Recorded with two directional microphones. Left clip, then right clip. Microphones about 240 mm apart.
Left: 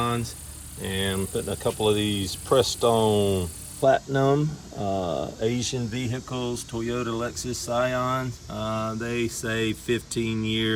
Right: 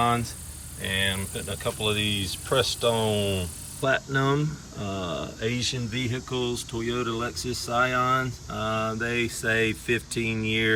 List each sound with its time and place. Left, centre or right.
0.8 s speech: centre
3.8 s speech: centre